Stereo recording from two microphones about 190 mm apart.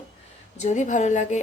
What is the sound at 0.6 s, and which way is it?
Speech, 40° left (ahead or behind).